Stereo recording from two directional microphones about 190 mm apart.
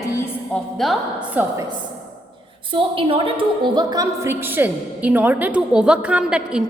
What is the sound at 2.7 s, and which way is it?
A woman's voice, 25° right (ahead or behind).